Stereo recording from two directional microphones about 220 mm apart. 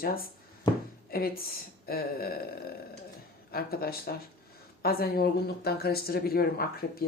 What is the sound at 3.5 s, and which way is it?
Speech, 45° left (ahead or behind).